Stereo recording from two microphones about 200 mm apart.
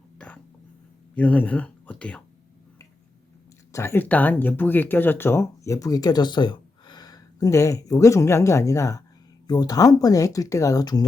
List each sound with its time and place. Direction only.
1.1 s speech: 5° left (ahead or behind)
3.7 s speech: 15° left (ahead or behind)